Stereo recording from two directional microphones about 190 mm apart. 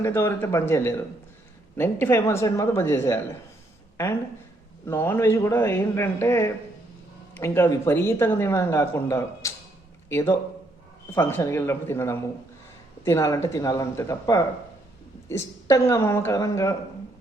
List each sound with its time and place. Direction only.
0.0 s speech: 15° left (ahead or behind)
4.9 s a man's voice: 15° left (ahead or behind)